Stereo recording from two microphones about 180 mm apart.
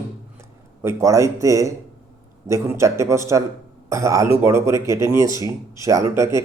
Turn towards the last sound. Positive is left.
turn(degrees=-15)  # may be behind; listen again after turning